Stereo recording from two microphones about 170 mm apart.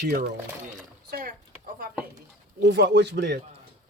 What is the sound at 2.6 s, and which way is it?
Speech, 90° right.